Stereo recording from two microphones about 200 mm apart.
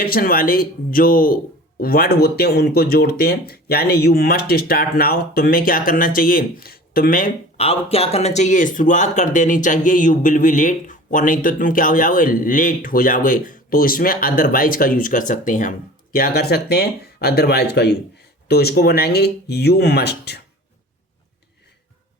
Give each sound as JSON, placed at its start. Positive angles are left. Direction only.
{"t": 0.0, "sound": "speech", "side_deg": 45}